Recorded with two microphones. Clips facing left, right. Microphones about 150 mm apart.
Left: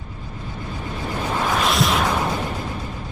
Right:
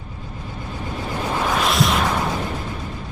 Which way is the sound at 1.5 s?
Centre (ahead or behind).